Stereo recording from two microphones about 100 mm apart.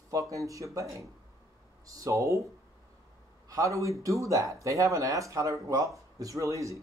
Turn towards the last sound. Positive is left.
turn(degrees=-30)  # may be behind; listen again after turning